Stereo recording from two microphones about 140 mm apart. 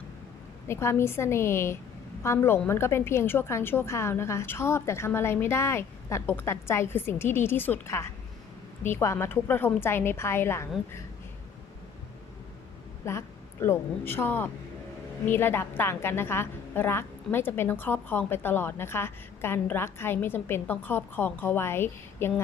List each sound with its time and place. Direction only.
0.7 s a woman's voice: 20° left (ahead or behind)
13.1 s a woman's voice: 20° left (ahead or behind)